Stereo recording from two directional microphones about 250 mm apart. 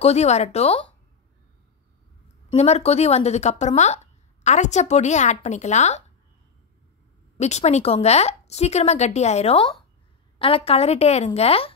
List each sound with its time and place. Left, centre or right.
0.0 s speech: left
2.5 s speech: left
7.3 s speech: left